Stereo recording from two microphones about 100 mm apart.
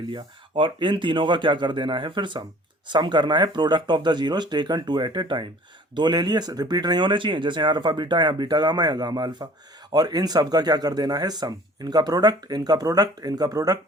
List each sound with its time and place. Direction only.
0.1 s speech: 60° right (ahead or behind); by 13.7 s 40° right (ahead or behind)